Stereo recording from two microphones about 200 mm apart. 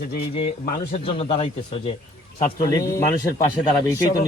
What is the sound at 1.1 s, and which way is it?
Speech, 30° left (ahead or behind).